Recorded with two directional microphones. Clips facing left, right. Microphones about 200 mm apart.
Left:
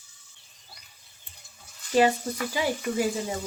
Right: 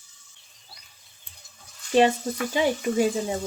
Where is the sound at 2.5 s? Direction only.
25° right (ahead or behind).